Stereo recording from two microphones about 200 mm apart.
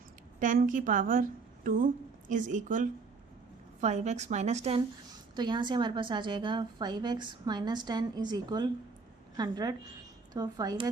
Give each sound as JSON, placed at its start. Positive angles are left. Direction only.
{"t": 0.3, "sound": "a woman's voice", "side_deg": -40}
{"t": 5.3, "sound": "a woman's voice", "side_deg": -20}